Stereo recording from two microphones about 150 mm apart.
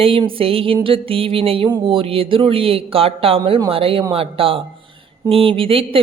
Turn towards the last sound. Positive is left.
turn(degrees=-40)  # may be behind; listen again after turning